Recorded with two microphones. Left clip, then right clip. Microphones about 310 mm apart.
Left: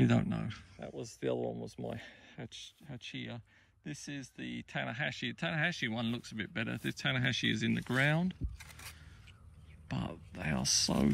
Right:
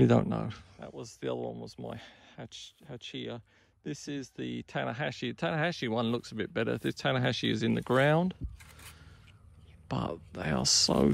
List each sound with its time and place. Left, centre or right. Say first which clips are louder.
0.0 s speech: right 7 dB; centre
1.9 s speech: even; right
8.5 s a sound: left 2 dB; centre
9.9 s speech: right 7 dB; centre